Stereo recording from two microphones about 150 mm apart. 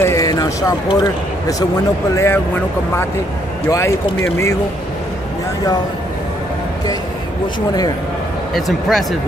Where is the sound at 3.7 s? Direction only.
20° left (ahead or behind).